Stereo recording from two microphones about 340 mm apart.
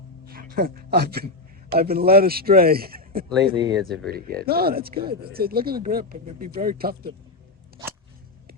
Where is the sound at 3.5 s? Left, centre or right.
Centre.